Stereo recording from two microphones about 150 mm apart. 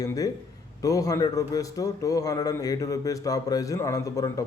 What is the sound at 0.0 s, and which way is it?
A man's voice, 25° left (ahead or behind).